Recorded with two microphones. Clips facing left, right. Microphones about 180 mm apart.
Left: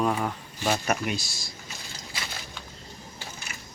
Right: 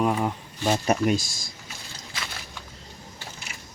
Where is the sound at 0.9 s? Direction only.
45° right (ahead or behind).